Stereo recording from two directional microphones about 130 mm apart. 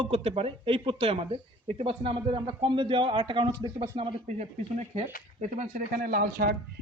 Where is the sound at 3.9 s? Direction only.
55° right (ahead or behind).